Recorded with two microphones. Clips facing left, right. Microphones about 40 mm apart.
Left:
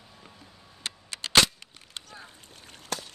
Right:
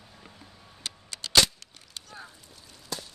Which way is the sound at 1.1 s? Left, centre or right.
Left.